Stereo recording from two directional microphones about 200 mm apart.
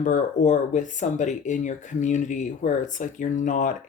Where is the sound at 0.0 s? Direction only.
40° left (ahead or behind).